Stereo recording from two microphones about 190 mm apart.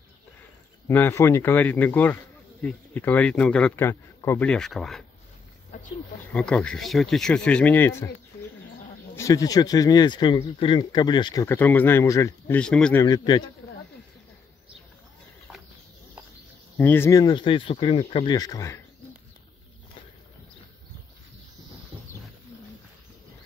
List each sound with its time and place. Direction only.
0.8 s a man's voice: 10° left (ahead or behind)
6.3 s speech: 5° left (ahead or behind)
9.1 s speech: 15° left (ahead or behind)
11.4 s a man's voice: 10° left (ahead or behind)
13.0 s speech: 20° left (ahead or behind)
16.7 s speech: 10° left (ahead or behind)